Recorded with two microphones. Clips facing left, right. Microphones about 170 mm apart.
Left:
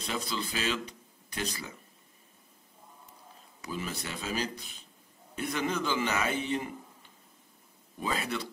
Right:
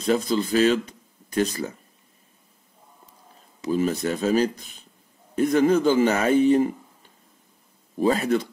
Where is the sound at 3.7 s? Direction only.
45° right (ahead or behind).